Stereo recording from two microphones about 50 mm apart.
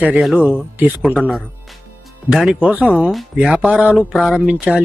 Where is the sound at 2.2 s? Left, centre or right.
Centre.